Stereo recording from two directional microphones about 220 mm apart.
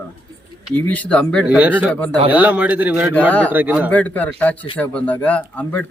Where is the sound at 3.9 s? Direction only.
5° left (ahead or behind).